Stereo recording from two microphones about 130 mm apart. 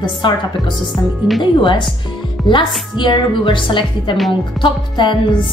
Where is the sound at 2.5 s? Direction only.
40° left (ahead or behind).